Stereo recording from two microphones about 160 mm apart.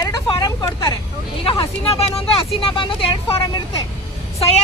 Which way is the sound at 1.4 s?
35° left (ahead or behind).